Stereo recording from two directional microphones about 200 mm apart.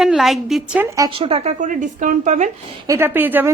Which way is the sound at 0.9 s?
15° right (ahead or behind).